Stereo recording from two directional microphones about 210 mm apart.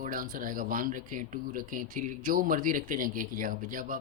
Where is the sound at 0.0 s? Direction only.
40° right (ahead or behind).